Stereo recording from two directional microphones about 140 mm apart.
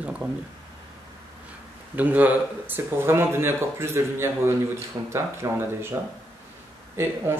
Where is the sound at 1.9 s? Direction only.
10° right (ahead or behind).